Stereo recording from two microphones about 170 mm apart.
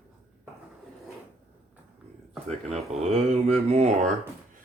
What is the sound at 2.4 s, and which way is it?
Speech, 40° right (ahead or behind).